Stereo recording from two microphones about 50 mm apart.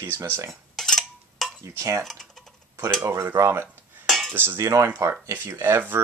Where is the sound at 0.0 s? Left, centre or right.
Right.